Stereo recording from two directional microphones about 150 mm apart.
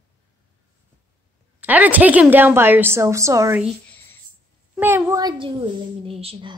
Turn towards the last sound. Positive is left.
turn(degrees=-40)  # may be behind; listen again after turning